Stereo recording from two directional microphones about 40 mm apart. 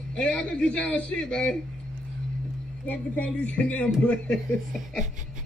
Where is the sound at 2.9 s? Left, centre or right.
Left.